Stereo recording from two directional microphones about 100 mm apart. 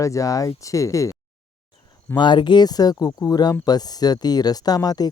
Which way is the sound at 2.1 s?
50° left (ahead or behind).